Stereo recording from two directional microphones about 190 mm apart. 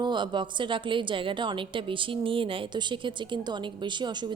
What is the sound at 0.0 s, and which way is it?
A woman's voice, 25° right (ahead or behind).